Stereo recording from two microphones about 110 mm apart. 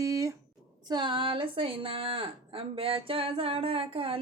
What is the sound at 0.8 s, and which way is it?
A woman's voice, 45° right (ahead or behind).